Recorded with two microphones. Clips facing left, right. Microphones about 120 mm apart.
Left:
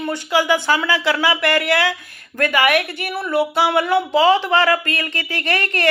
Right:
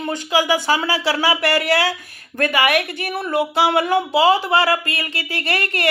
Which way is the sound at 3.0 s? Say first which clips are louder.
Left 1 dB; 45° right (ahead or behind).